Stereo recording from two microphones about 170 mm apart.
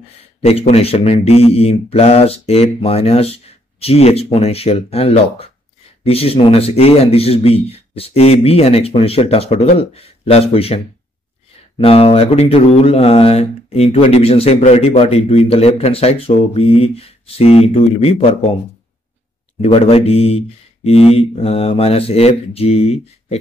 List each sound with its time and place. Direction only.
0.4 s speech: 35° left (ahead or behind)
11.8 s speech: 35° left (ahead or behind)
19.6 s speech: 35° left (ahead or behind)